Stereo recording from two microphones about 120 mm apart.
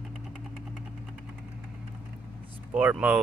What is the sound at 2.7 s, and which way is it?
Speech, 10° right (ahead or behind).